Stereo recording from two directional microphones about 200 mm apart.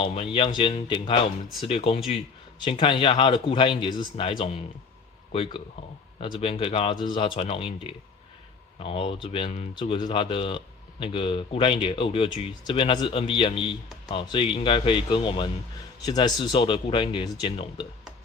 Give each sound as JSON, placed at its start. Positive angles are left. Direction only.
{"t": 0.0, "sound": "speech", "side_deg": 25}